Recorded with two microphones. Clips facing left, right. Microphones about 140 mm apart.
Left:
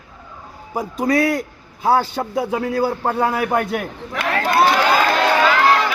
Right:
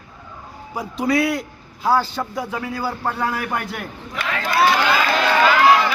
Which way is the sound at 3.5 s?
50° left (ahead or behind).